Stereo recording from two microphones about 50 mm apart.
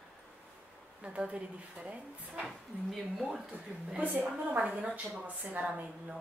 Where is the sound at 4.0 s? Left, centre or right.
Right.